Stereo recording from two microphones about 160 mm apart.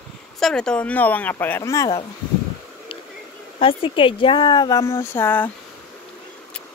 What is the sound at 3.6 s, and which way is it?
Speech, 35° left (ahead or behind).